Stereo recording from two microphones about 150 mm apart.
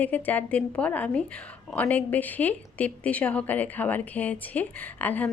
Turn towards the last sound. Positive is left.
turn(degrees=10)  # may be behind; listen again after turning